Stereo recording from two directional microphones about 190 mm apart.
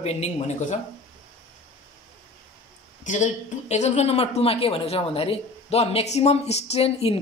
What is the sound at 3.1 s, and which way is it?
A man's voice, 40° left (ahead or behind).